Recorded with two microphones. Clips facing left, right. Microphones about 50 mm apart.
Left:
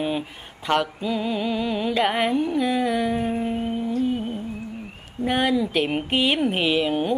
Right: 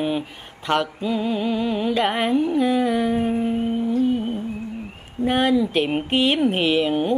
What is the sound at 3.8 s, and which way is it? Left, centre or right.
Humming, right.